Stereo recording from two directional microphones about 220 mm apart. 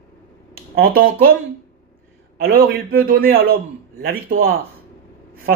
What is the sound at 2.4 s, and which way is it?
Speech, 45° right (ahead or behind).